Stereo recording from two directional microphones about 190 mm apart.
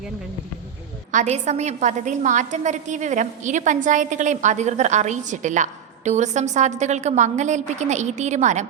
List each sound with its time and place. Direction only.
1.1 s a woman's voice: 35° right (ahead or behind)